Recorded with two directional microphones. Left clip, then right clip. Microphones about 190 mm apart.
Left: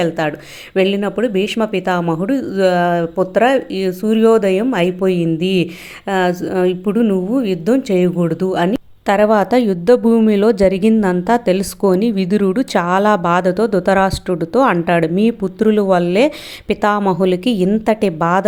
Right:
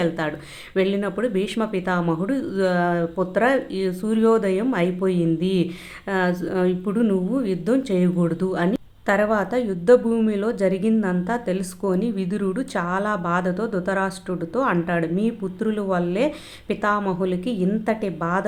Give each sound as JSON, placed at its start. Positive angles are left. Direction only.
{"t": 0.0, "sound": "a woman's voice", "side_deg": 30}